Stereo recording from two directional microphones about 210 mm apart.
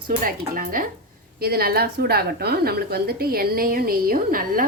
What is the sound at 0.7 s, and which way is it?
A woman's voice, 40° right (ahead or behind).